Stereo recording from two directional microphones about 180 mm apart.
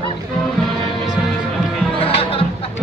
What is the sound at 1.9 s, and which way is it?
Music, 30° left (ahead or behind).